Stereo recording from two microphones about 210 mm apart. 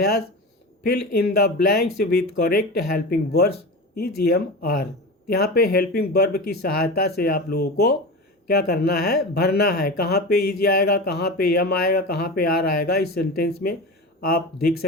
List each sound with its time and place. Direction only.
0.9 s speech: 50° left (ahead or behind)